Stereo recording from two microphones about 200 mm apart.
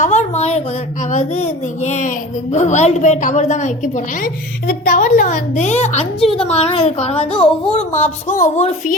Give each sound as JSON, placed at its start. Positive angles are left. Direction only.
{"t": 0.0, "sound": "a sound", "side_deg": 35}
{"t": 1.1, "sound": "speech", "side_deg": 35}
{"t": 7.3, "sound": "speech", "side_deg": 5}
{"t": 7.8, "sound": "speech", "side_deg": 35}